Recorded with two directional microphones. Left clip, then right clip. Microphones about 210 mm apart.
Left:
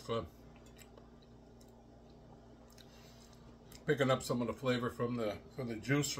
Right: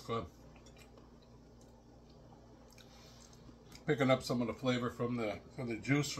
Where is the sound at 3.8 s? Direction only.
25° left (ahead or behind).